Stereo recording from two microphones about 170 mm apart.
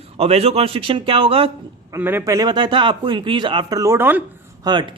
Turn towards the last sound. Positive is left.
turn(degrees=-25)  # may be behind; listen again after turning